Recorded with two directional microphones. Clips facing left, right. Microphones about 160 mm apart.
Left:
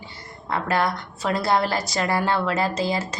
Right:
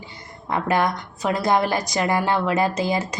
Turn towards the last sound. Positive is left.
turn(degrees=-15)  # may be behind; listen again after turning